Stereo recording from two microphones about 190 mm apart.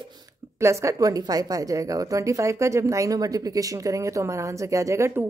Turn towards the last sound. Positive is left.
turn(degrees=-15)  # may be behind; listen again after turning